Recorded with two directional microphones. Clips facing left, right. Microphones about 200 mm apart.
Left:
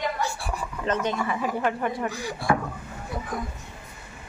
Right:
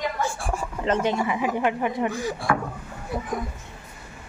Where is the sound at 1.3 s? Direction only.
15° right (ahead or behind).